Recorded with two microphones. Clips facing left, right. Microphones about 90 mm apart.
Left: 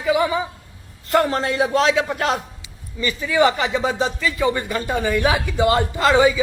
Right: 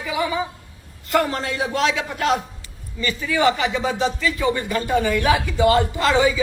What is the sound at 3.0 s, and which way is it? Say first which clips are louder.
Speech: left 2 dB; 20° left (ahead or behind).